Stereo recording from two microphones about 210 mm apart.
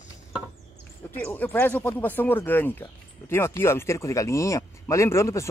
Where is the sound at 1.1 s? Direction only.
10° left (ahead or behind).